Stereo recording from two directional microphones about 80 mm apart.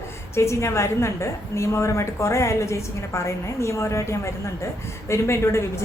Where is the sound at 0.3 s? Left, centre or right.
Left.